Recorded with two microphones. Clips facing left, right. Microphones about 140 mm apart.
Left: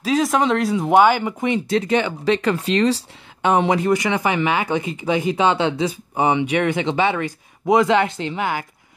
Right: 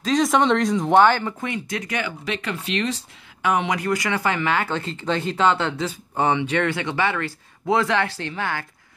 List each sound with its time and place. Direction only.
0.0 s speech: 5° left (ahead or behind)